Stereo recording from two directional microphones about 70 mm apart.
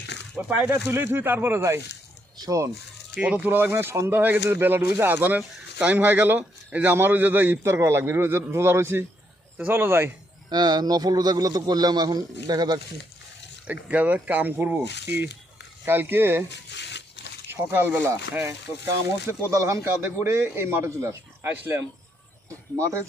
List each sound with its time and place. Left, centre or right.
0.3 s speech: centre
0.7 s a man's voice: right
3.2 s speech: centre; by 4.1 s right
4.1 s a man's voice: right
7.6 s a man's voice: right
10.5 s a man's voice: right
13.7 s a man's voice: right
17.5 s a man's voice: right
18.1 s a man's voice: right